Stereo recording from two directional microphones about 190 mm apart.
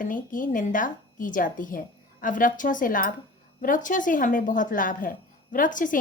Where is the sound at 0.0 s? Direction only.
45° left (ahead or behind).